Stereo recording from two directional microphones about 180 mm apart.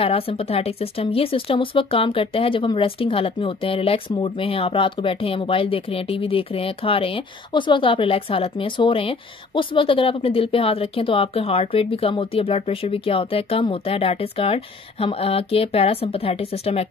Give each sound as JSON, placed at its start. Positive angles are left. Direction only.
{"t": 0.0, "sound": "speech", "side_deg": 30}